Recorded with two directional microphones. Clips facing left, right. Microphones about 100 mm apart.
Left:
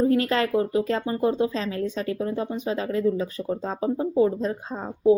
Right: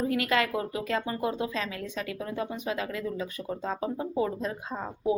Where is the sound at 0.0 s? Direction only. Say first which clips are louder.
Left 5 dB; 35° left (ahead or behind).